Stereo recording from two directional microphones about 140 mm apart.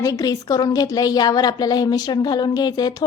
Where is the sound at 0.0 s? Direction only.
25° left (ahead or behind).